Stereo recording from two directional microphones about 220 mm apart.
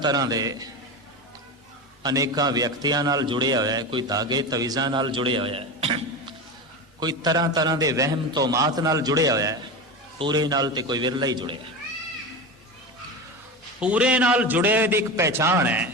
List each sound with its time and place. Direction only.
0.0 s a man's voice: 15° right (ahead or behind)
2.0 s a man's voice: 15° right (ahead or behind)
13.7 s a man's voice: 5° right (ahead or behind)